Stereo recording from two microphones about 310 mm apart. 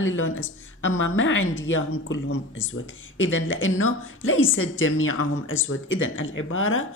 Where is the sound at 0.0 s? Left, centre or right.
Left.